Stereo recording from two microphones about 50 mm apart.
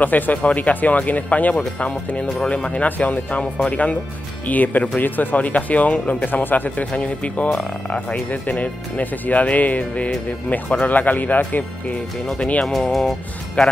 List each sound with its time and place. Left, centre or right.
0.0 s speech: left
2.2 s speech: centre
2.5 s speech: left
12.4 s speech: left
12.6 s speech: centre